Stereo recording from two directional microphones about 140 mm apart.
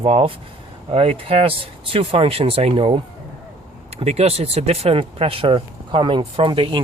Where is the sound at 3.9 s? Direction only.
50° right (ahead or behind).